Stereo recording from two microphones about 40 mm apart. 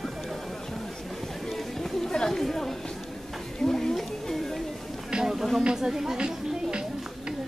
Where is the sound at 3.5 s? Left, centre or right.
Centre.